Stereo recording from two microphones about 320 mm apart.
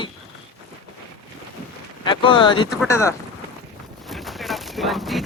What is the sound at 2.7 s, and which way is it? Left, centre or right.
Speech, centre.